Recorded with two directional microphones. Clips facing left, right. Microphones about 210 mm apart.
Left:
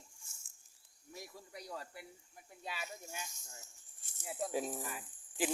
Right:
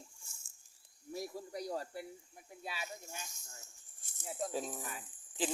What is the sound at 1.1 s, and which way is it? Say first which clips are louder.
Snake: right 9 dB; 35° right (ahead or behind).